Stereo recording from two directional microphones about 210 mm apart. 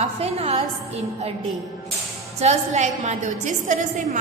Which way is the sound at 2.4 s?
35° right (ahead or behind).